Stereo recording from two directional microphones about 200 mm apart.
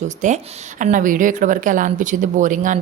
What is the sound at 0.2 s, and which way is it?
Speech, 40° right (ahead or behind).